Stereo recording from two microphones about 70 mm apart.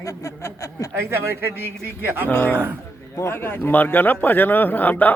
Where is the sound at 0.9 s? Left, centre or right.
Right.